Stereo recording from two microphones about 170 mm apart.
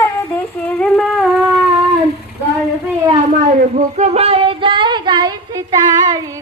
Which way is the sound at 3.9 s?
40° right (ahead or behind).